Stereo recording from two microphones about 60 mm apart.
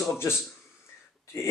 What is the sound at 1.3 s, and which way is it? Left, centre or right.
Speech, left.